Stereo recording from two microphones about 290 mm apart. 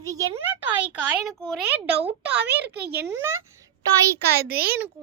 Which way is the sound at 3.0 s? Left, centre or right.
Centre.